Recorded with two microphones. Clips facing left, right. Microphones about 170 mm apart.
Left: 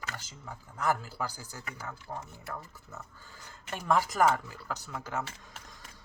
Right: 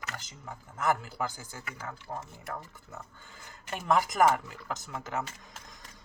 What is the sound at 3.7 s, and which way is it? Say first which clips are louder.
Speech: right 1 dB; 20° right (ahead or behind).